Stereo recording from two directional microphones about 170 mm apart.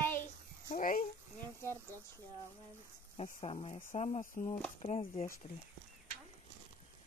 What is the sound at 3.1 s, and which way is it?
Speech, 35° left (ahead or behind).